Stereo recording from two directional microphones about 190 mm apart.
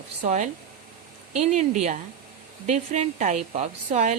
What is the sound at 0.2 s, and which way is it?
A woman's voice, 40° right (ahead or behind).